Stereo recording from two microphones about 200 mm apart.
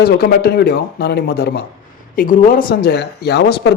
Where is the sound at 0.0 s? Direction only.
50° left (ahead or behind).